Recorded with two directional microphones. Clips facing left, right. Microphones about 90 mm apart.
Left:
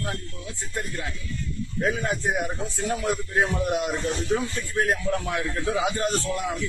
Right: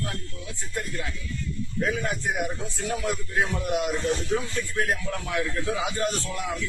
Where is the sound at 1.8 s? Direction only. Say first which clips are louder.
Left 2 dB; 35° left (ahead or behind).